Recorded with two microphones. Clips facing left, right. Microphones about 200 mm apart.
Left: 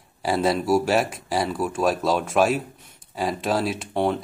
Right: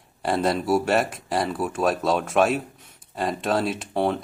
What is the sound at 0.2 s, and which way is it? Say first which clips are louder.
Speech: left 1 dB; 5° left (ahead or behind).